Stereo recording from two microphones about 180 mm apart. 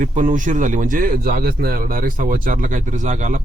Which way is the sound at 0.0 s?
45° right (ahead or behind).